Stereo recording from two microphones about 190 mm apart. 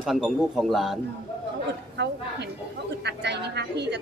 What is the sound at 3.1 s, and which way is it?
Speech, 65° right (ahead or behind).